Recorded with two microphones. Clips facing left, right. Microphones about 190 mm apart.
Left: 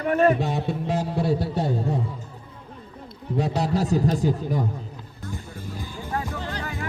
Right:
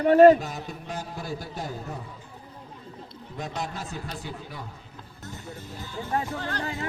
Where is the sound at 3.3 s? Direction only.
35° left (ahead or behind).